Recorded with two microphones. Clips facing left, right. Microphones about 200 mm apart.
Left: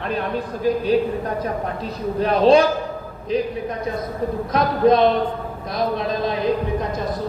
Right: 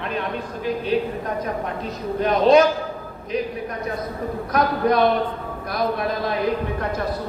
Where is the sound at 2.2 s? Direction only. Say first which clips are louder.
Left 1 dB; 30° left (ahead or behind).